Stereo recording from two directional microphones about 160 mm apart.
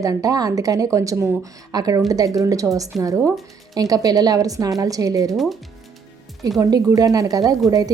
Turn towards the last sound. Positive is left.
turn(degrees=-20)  # may be behind; listen again after turning